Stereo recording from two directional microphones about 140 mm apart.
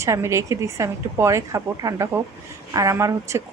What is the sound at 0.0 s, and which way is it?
A woman's voice, 20° right (ahead or behind).